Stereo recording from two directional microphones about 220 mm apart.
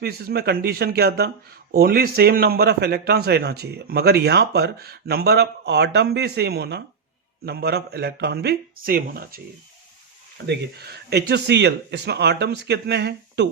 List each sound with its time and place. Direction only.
0.0 s a man's voice: 45° right (ahead or behind)
10.4 s a man's voice: 50° right (ahead or behind)